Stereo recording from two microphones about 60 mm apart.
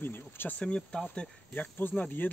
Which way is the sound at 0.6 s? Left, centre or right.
Centre.